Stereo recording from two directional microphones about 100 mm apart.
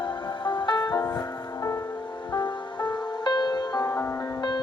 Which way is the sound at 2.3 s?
45° left (ahead or behind).